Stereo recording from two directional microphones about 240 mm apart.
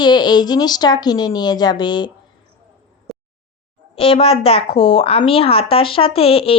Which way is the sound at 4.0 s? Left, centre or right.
Left.